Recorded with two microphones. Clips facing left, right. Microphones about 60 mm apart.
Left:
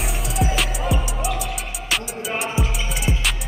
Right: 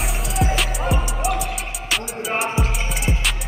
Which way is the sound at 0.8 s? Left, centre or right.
Right.